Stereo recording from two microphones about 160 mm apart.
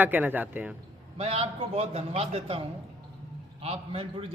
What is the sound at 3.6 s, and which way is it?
Speech, 35° right (ahead or behind).